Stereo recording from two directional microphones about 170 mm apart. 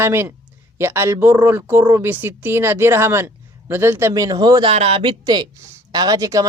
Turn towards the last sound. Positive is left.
turn(degrees=-20)  # may be behind; listen again after turning